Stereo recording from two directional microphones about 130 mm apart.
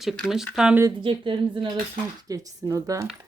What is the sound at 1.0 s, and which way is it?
Speech, 40° right (ahead or behind).